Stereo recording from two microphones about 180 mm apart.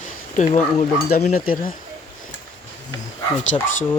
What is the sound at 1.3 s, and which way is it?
Speech, 50° left (ahead or behind).